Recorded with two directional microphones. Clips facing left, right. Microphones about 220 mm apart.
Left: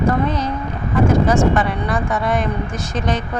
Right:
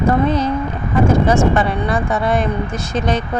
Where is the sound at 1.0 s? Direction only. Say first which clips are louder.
Right 1 dB; 25° right (ahead or behind).